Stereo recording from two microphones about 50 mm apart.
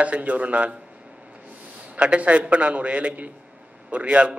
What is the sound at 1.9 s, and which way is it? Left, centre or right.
A man's voice, right.